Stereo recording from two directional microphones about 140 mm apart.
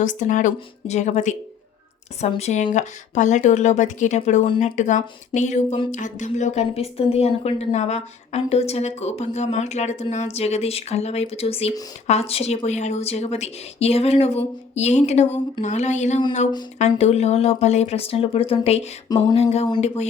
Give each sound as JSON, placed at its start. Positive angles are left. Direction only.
{"t": 0.0, "sound": "speech", "side_deg": 65}
{"t": 2.4, "sound": "a woman's voice", "side_deg": 55}
{"t": 19.0, "sound": "a sound", "side_deg": 25}
{"t": 19.4, "sound": "a woman's voice", "side_deg": 50}